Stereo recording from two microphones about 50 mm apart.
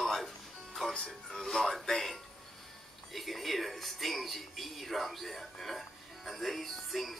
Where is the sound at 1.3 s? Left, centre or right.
Centre.